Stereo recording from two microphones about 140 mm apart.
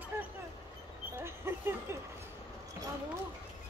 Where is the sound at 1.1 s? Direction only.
20° right (ahead or behind).